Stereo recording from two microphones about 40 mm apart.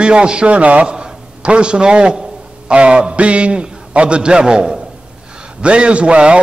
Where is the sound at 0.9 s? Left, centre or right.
Right.